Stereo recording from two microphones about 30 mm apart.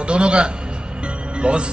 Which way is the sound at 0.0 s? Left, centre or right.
Right.